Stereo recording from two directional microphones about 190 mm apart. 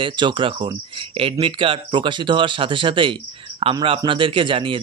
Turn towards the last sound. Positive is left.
turn(degrees=-25)  # may be behind; listen again after turning